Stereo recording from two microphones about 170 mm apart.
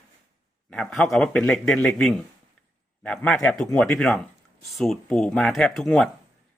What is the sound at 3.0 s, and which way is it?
Speech, 5° left (ahead or behind).